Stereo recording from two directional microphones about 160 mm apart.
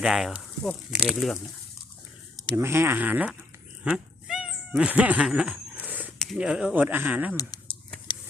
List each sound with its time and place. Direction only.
0.0 s speech: centre (ahead or behind)
2.6 s speech: 15° right (ahead or behind)
3.8 s dog: 5° right (ahead or behind)
4.7 s a sound: 10° right (ahead or behind)
6.1 s speech: centre (ahead or behind)
7.3 s a sound: 25° left (ahead or behind)